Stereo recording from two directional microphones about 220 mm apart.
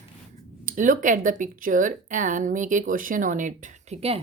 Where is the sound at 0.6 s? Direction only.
35° right (ahead or behind).